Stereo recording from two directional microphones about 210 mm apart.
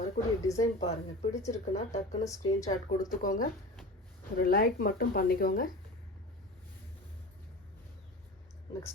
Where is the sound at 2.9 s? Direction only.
40° left (ahead or behind).